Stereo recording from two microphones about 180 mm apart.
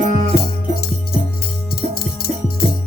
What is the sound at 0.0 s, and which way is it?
Music, 50° right (ahead or behind).